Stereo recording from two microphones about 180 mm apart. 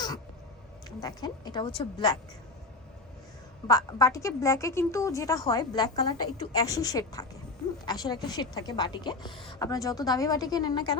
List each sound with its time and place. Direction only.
0.9 s a woman's voice: 20° left (ahead or behind)
3.7 s a woman's voice: 20° left (ahead or behind)